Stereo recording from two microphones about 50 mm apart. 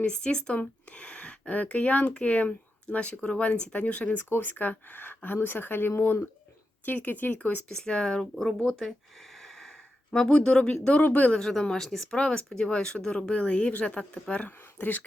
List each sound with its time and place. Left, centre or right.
0.0 s speech: centre
7.8 s speech: centre
10.2 s speech: left
11.3 s speech: centre
14.8 s speech: left